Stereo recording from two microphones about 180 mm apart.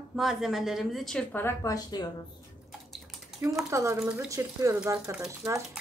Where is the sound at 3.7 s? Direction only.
15° right (ahead or behind).